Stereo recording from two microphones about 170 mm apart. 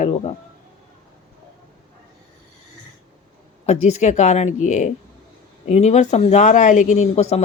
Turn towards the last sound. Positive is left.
turn(degrees=40)  # may be behind; listen again after turning